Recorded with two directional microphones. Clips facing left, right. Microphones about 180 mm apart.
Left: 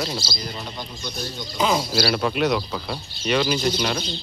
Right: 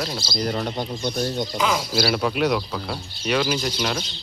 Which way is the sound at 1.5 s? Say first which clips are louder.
Left 4 dB; 25° left (ahead or behind).